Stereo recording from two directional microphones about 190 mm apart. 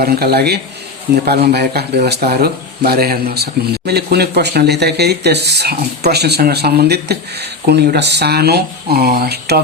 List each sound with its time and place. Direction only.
0.0 s speech: 55° right (ahead or behind)